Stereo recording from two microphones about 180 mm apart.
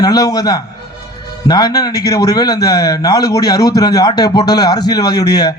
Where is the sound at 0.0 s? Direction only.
20° left (ahead or behind).